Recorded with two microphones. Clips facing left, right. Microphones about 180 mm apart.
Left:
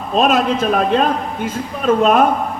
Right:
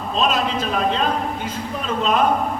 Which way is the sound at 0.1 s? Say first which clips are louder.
Left 6 dB; 55° left (ahead or behind).